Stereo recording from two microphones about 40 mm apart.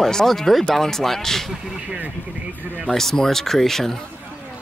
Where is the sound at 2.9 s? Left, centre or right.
Centre.